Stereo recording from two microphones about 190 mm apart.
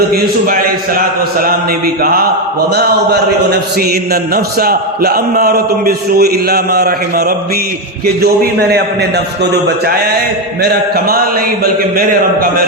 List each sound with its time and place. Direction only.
0.1 s a man's voice: 50° right (ahead or behind)
2.7 s a sound: 60° right (ahead or behind)
10.6 s a man's voice: 55° right (ahead or behind)